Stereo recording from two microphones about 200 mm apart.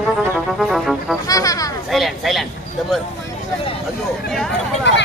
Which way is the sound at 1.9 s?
Centre (ahead or behind).